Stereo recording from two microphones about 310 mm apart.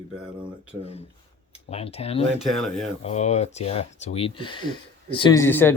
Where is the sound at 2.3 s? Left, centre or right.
Centre.